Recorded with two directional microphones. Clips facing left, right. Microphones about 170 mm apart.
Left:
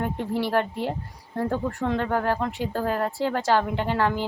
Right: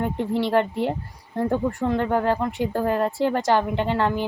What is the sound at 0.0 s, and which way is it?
Speech, 20° right (ahead or behind).